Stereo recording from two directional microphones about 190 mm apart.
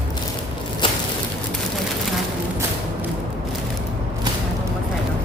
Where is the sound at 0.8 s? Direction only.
25° left (ahead or behind).